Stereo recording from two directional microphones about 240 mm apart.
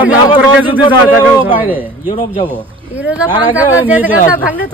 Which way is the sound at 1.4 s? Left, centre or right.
Centre.